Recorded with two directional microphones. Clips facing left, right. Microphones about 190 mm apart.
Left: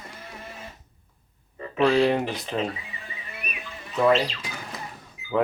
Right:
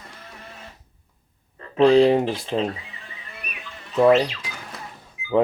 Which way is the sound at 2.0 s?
30° right (ahead or behind).